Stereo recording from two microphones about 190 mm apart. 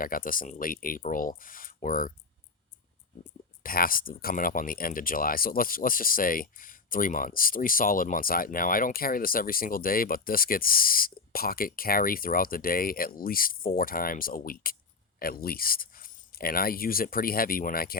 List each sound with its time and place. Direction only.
0.0 s speech: 45° left (ahead or behind)
3.6 s speech: 50° left (ahead or behind)